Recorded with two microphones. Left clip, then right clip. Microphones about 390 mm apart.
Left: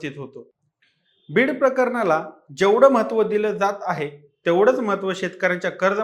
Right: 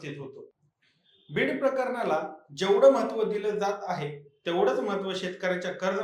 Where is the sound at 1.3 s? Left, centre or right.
Left.